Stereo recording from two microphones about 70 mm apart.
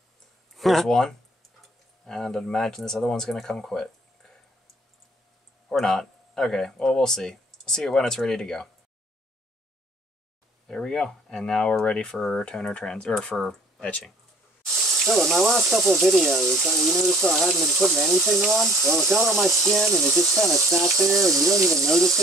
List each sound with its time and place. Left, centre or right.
0.6 s speech: centre
5.7 s speech: centre
10.7 s speech: centre
14.7 s speech: centre